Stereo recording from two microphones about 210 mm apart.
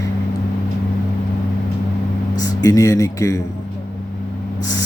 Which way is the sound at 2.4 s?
15° left (ahead or behind).